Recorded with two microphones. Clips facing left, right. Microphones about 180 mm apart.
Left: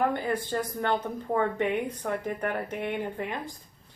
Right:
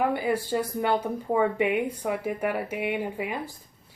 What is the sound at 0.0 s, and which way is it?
A woman's voice, 10° right (ahead or behind).